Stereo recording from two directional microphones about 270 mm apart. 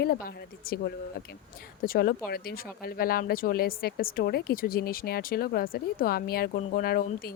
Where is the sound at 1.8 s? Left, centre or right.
Left.